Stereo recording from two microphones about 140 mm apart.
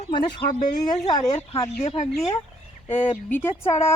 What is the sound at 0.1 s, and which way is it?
Speech, 30° left (ahead or behind).